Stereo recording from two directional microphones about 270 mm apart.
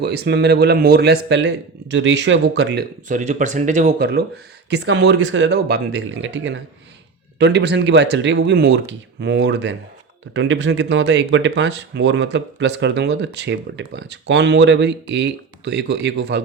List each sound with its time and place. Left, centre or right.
0.0 s speech: right